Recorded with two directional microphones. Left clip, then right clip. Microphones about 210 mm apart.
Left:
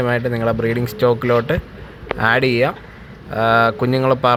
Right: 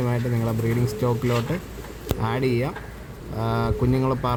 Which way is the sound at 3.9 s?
10° left (ahead or behind).